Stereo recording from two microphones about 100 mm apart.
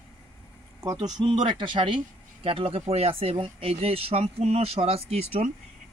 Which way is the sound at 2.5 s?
65° right (ahead or behind).